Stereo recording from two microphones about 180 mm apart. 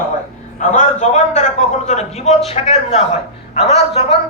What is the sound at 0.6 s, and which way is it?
A man's voice, 40° left (ahead or behind).